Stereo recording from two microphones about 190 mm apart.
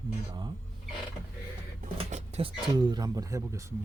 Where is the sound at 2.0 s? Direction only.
35° right (ahead or behind).